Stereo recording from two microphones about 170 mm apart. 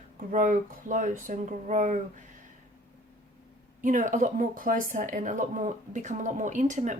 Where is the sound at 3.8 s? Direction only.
50° right (ahead or behind).